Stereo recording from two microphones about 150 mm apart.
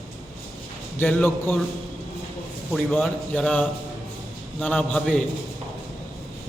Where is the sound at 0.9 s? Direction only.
15° left (ahead or behind).